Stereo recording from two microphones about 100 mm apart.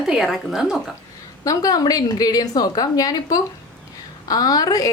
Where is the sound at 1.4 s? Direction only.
35° left (ahead or behind).